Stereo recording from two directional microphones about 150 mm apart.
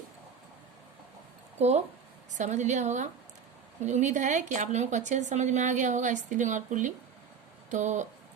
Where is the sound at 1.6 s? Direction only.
45° right (ahead or behind).